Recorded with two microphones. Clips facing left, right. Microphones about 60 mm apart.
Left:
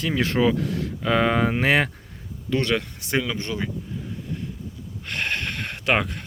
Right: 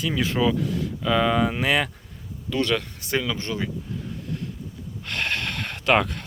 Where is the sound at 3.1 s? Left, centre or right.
Left.